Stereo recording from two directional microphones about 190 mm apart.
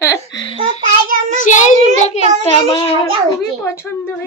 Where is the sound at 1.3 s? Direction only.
40° left (ahead or behind); by 2.8 s 20° left (ahead or behind).